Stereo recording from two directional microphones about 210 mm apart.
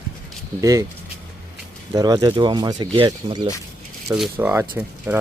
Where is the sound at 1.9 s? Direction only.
20° right (ahead or behind).